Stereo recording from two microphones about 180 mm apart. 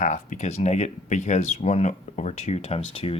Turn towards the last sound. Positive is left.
turn(degrees=30)  # may be behind; listen again after turning